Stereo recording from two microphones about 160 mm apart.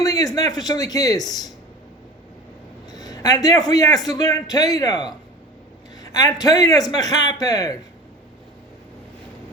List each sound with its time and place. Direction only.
0.0 s speech: 25° left (ahead or behind)
2.9 s a sound: 25° left (ahead or behind)
3.7 s a man's voice: 20° left (ahead or behind)